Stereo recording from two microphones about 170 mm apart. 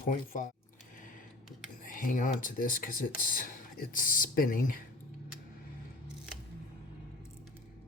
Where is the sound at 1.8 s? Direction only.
55° left (ahead or behind).